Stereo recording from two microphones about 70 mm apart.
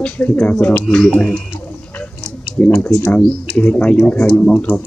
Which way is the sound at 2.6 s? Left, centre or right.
Left.